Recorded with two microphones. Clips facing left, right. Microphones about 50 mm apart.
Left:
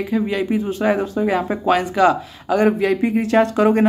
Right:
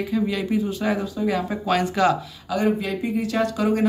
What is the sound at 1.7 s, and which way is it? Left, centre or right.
Speech, centre.